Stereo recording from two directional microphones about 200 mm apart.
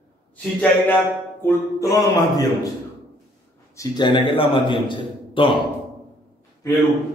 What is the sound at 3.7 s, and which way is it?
A man's voice, 20° left (ahead or behind).